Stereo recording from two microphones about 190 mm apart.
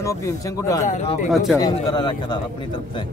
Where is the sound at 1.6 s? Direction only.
20° left (ahead or behind).